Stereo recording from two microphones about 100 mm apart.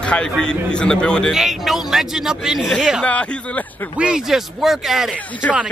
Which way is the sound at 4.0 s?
5° right (ahead or behind).